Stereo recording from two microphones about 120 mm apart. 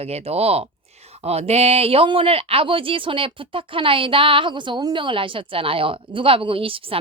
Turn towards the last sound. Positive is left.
turn(degrees=-50)  # may be behind; listen again after turning